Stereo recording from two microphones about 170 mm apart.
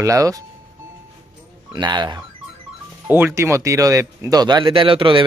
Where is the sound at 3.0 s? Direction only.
10° right (ahead or behind).